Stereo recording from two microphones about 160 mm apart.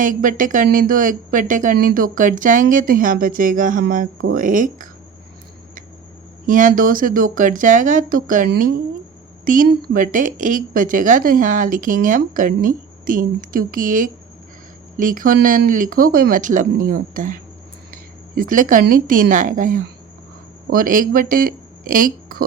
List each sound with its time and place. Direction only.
0.0 s speech: 55° right (ahead or behind)
6.4 s speech: 55° right (ahead or behind)